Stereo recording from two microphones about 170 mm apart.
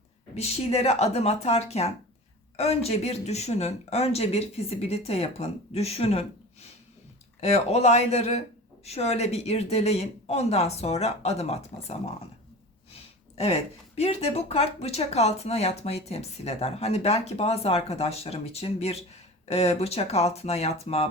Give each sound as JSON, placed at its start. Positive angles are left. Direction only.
{"t": 0.3, "sound": "speech", "side_deg": 35}
{"t": 7.4, "sound": "speech", "side_deg": 40}